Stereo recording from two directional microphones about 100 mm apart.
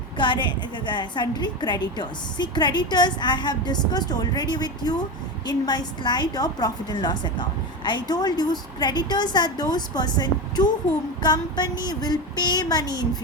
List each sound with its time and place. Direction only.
0.2 s a woman's voice: 50° left (ahead or behind)